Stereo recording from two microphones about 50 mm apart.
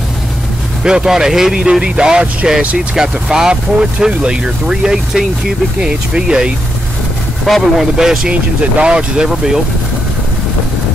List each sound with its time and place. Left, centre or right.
0.8 s speech: centre
2.6 s speech: right
3.0 s speech: centre
7.4 s speech: centre
7.8 s speech: centre
8.3 s speech: right